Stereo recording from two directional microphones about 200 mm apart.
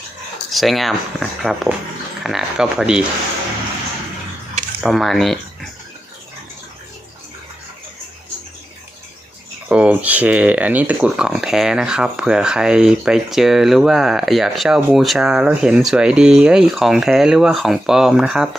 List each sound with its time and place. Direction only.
0.5 s speech: centre (ahead or behind)
4.8 s speech: centre (ahead or behind)
9.6 s speech: 5° right (ahead or behind)